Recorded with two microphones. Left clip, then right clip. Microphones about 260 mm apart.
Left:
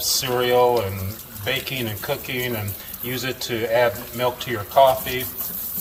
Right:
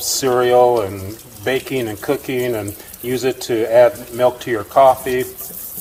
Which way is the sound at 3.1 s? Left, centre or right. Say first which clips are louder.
Right 8 dB; right.